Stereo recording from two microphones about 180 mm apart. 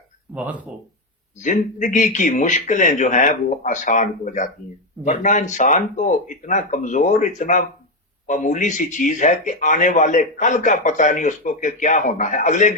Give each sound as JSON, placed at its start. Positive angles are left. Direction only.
{"t": 0.3, "sound": "speech", "side_deg": -10}
{"t": 1.4, "sound": "a man's voice", "side_deg": 45}